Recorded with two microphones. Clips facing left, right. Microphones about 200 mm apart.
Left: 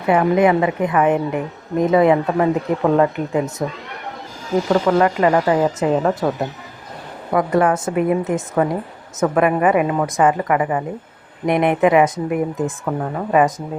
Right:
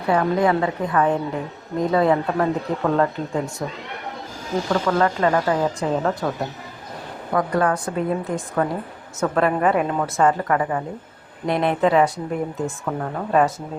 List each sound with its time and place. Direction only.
0.0 s a woman's voice: 15° left (ahead or behind)
4.7 s a woman's voice: 15° left (ahead or behind)
7.3 s a woman's voice: 25° left (ahead or behind)
13.0 s a woman's voice: 5° left (ahead or behind)